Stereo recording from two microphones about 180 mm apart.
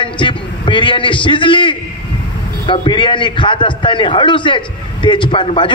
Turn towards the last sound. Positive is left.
turn(degrees=25)  # may be behind; listen again after turning